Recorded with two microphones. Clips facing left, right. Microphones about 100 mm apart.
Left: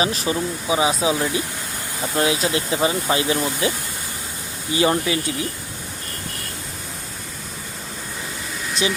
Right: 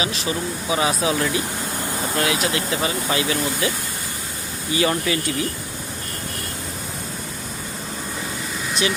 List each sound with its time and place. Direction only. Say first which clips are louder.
0.3 s speech: left 3 dB; 30° left (ahead or behind)
0.7 s speech: left 1 dB; 20° left (ahead or behind)
4.7 s speech: left 2 dB; 25° left (ahead or behind)